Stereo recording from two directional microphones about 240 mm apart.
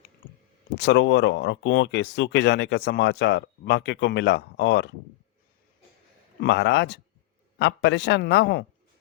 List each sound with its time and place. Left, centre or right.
0.8 s speech: left
6.4 s speech: left